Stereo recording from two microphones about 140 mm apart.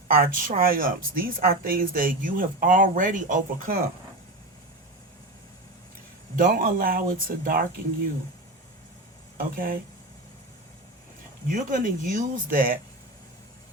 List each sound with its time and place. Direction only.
0.1 s speech: 85° right
6.3 s speech: 85° right
9.4 s speech: 90° right
11.4 s speech: 70° right (ahead or behind)